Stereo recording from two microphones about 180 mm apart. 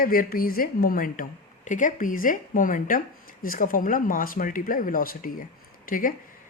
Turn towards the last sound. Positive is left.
turn(degrees=50)  # may be behind; listen again after turning